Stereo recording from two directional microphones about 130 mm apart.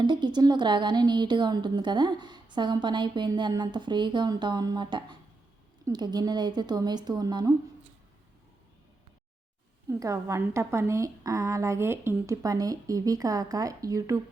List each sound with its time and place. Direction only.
0.1 s a woman's voice: 35° right (ahead or behind)
10.0 s a woman's voice: 25° right (ahead or behind)